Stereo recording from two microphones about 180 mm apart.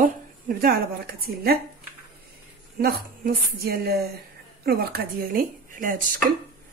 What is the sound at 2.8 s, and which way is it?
A woman's voice, 60° right (ahead or behind).